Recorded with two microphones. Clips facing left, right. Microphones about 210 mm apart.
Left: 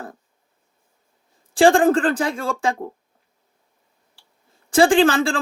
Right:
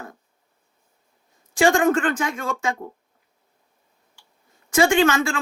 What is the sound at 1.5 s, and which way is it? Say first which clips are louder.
A woman's voice: left 3 dB; 30° left (ahead or behind).